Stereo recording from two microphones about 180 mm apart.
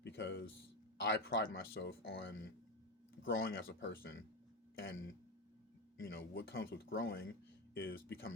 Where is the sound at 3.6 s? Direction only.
75° left (ahead or behind); by 4.2 s 90° left.